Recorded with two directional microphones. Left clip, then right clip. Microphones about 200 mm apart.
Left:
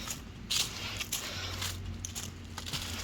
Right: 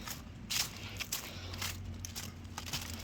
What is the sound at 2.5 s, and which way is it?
Crushing, 30° right (ahead or behind).